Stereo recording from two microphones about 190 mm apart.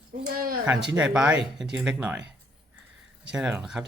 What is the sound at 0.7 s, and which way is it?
Speech, 5° right (ahead or behind).